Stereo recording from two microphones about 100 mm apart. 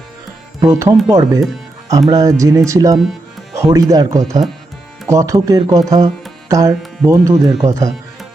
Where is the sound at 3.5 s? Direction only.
35° right (ahead or behind).